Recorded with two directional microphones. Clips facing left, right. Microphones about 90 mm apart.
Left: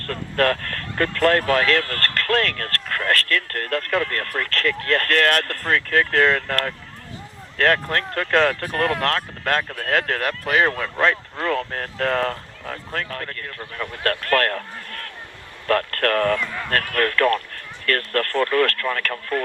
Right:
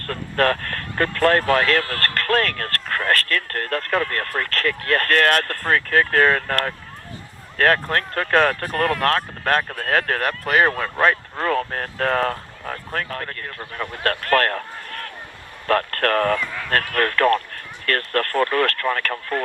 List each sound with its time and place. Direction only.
0.1 s speech: 25° right (ahead or behind)